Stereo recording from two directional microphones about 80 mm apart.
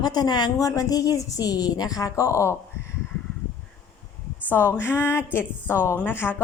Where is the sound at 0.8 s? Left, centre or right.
Left.